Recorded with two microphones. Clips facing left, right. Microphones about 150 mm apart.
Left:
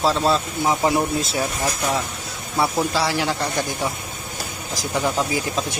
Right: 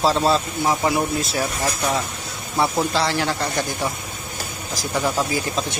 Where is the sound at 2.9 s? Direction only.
10° left (ahead or behind).